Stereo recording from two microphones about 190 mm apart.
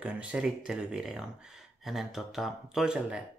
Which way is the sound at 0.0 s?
5° right (ahead or behind).